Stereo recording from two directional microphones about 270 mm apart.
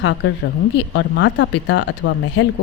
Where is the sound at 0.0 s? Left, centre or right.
Left.